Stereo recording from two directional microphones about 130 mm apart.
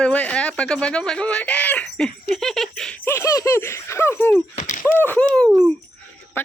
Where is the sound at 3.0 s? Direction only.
20° left (ahead or behind).